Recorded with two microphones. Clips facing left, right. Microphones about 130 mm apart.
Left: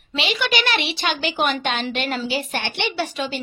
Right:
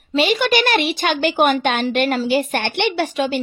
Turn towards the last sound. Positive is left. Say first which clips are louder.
# right 6 dB
turn(degrees=-55)  # may be behind; listen again after turning